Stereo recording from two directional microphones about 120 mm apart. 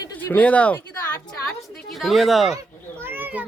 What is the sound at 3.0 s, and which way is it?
Cat, 15° right (ahead or behind).